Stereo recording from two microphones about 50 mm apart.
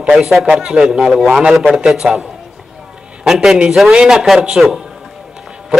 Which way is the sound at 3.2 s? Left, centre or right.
Centre.